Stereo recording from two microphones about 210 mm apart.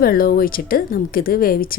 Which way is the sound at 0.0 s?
45° left (ahead or behind).